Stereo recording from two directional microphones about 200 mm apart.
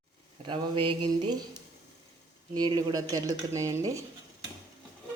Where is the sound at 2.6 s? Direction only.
20° right (ahead or behind).